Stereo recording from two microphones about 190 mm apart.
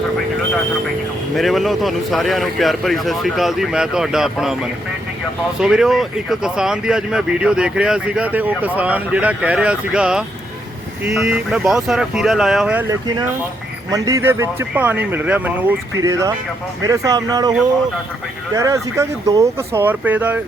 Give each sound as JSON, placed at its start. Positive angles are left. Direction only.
{"t": 1.4, "sound": "speech", "side_deg": 0}
{"t": 12.9, "sound": "speech", "side_deg": -15}
{"t": 18.5, "sound": "speech", "side_deg": -15}